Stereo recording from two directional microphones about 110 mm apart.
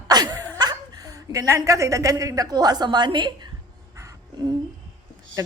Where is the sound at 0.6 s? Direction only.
35° right (ahead or behind).